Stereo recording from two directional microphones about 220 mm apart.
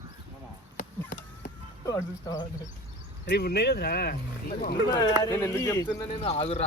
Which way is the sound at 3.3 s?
50° left (ahead or behind).